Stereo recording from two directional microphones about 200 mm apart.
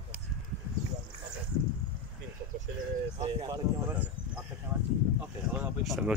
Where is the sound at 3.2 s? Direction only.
20° right (ahead or behind).